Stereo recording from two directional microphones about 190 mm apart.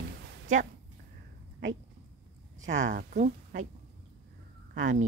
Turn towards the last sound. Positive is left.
turn(degrees=-45)  # may be behind; listen again after turning